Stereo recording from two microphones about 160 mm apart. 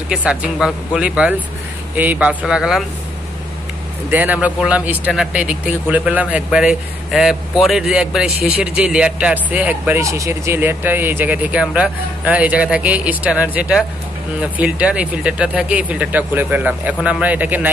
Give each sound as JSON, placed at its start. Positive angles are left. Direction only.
{"t": 0.1, "sound": "speech", "side_deg": -5}
{"t": 4.1, "sound": "speech", "side_deg": -10}